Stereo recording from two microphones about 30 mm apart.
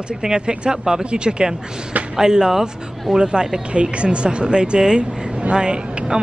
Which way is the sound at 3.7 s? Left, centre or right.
Right.